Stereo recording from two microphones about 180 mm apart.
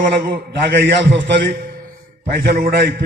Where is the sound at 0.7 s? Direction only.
70° right (ahead or behind).